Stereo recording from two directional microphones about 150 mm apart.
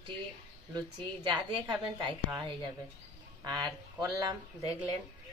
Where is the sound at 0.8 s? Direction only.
30° right (ahead or behind).